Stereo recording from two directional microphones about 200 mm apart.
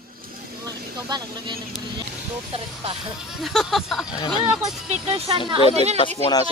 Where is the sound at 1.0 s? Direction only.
20° right (ahead or behind).